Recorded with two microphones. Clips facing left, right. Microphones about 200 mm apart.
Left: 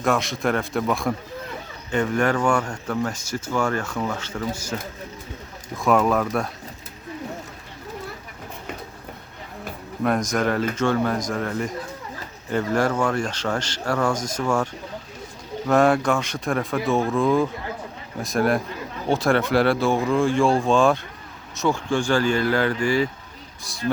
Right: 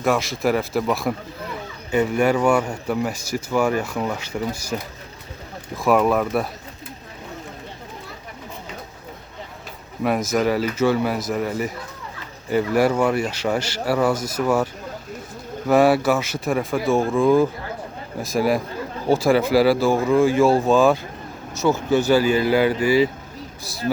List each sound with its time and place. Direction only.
0.0 s a man's voice: centre (ahead or behind)
5.7 s a man's voice: centre (ahead or behind)
10.0 s a man's voice: 5° right (ahead or behind)